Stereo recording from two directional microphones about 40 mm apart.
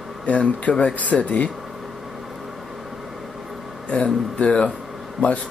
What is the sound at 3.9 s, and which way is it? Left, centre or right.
Speech, left.